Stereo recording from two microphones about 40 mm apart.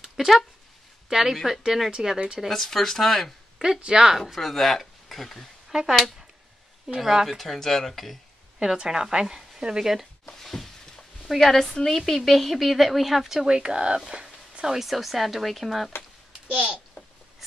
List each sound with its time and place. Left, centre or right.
0.0 s a sound: centre
1.0 s speech: centre
2.0 s speech: centre
2.4 s speech: centre
3.8 s speech: centre
4.3 s speech: centre
5.7 s speech: centre
7.0 s speech: centre
8.6 s speech: centre
10.4 s a sound: centre
11.3 s a woman's voice: centre
13.5 s speech: right
14.8 s speech: centre
16.4 s a child's voice: right